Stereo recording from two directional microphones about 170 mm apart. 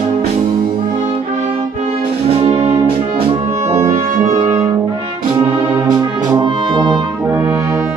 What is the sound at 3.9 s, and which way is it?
Brass instrument, 40° right (ahead or behind).